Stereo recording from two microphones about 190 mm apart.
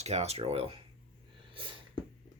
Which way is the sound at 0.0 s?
35° right (ahead or behind).